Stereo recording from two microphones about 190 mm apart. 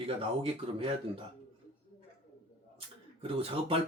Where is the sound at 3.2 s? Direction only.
30° right (ahead or behind).